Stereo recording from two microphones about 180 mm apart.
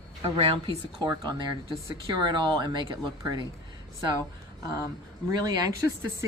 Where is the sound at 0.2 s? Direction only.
30° right (ahead or behind).